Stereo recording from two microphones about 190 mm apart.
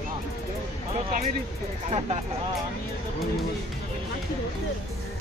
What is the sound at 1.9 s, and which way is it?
Speech, 30° right (ahead or behind).